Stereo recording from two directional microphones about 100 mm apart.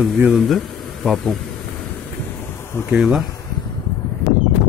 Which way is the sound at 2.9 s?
10° right (ahead or behind).